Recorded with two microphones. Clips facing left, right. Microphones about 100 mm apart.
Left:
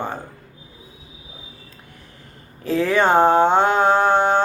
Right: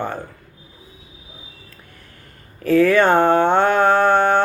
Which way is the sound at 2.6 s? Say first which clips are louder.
Right 4 dB; 20° left (ahead or behind).